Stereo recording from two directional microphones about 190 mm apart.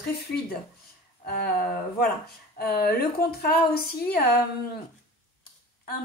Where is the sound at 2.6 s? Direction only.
55° left (ahead or behind).